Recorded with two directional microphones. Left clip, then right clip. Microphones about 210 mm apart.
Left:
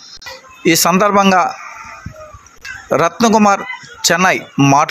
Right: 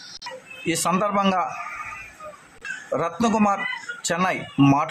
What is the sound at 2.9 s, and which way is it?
A man's voice, 25° left (ahead or behind).